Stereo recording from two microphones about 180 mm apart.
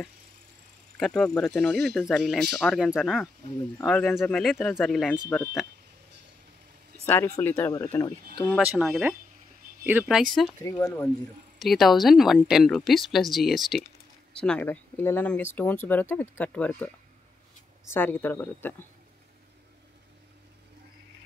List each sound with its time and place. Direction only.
0.9 s speech: 5° left (ahead or behind)
7.1 s speech: 15° left (ahead or behind)
8.6 s speech: 5° right (ahead or behind)
10.6 s speech: 15° left (ahead or behind)
11.5 s speech: centre (ahead or behind)
17.9 s speech: 10° left (ahead or behind)